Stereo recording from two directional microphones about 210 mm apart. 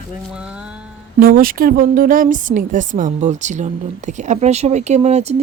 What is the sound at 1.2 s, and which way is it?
A woman's voice, 45° right (ahead or behind).